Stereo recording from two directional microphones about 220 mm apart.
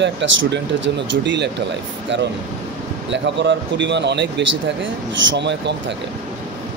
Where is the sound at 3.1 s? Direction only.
55° right (ahead or behind).